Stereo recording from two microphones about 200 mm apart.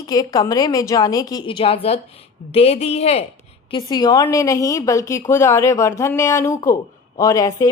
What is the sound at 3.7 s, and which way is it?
A woman's voice, 20° left (ahead or behind).